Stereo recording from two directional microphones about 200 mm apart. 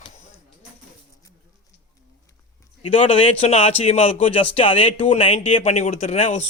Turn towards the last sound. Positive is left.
turn(degrees=30)  # may be behind; listen again after turning